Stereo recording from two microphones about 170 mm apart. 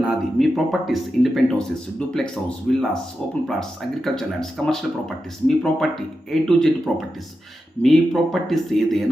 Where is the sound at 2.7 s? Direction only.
5° left (ahead or behind).